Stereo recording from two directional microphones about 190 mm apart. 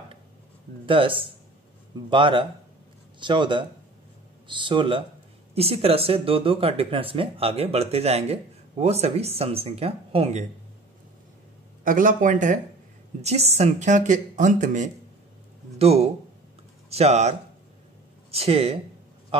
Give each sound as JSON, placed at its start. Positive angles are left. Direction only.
{"t": 0.8, "sound": "speech", "side_deg": -25}
{"t": 11.8, "sound": "a man's voice", "side_deg": -45}